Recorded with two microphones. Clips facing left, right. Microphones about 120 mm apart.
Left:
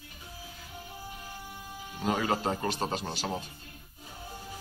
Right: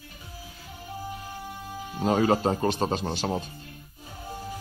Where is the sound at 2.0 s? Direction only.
35° right (ahead or behind).